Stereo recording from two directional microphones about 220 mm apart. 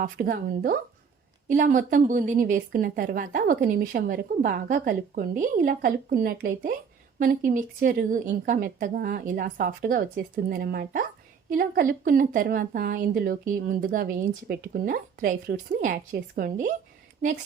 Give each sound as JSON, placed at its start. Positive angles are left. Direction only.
{"t": 0.0, "sound": "a woman's voice", "side_deg": -40}